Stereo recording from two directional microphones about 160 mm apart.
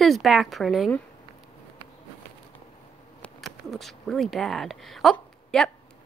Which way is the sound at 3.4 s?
Centre (ahead or behind).